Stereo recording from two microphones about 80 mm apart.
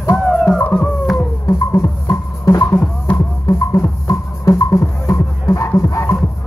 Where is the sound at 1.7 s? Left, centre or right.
Left.